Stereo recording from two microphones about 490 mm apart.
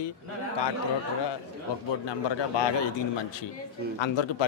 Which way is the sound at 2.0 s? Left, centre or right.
Left.